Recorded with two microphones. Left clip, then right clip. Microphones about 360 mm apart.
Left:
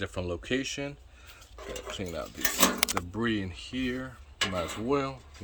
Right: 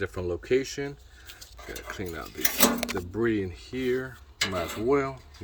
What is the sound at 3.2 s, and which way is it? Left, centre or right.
Speech, centre.